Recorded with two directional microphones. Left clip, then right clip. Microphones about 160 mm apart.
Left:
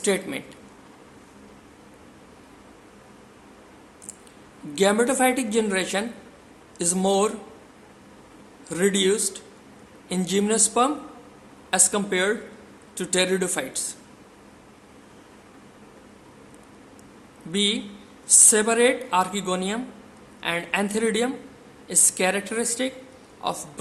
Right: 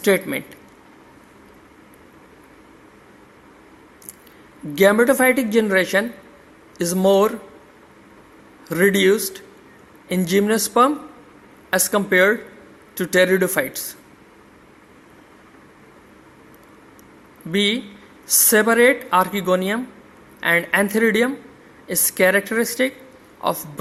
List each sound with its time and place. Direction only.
0.0 s a woman's voice: 30° right (ahead or behind)
4.7 s speech: 30° right (ahead or behind)
8.7 s speech: 30° right (ahead or behind)
17.5 s a woman's voice: 30° right (ahead or behind)